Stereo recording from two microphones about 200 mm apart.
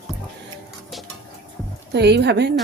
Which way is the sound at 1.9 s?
55° right (ahead or behind).